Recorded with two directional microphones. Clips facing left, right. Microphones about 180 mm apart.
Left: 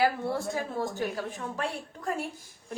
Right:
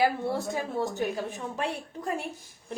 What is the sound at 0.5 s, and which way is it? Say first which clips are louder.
A woman's voice: right 2 dB; 20° right (ahead or behind).